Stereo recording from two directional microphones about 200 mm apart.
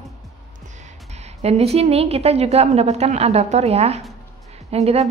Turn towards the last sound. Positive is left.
turn(degrees=-30)  # may be behind; listen again after turning